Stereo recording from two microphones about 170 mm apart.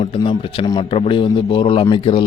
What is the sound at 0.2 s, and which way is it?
A man's voice, 25° left (ahead or behind).